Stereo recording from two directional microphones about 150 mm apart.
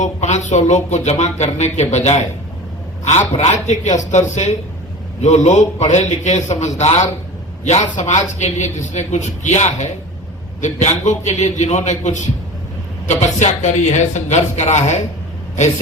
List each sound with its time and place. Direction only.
0.0 s speech: 50° left (ahead or behind)